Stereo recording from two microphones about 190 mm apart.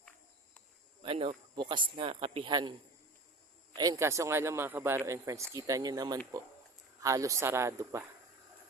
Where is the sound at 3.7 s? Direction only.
20° right (ahead or behind).